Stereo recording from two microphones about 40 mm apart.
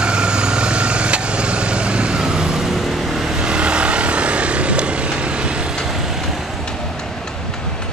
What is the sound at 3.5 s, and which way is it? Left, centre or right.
Vehicle, right.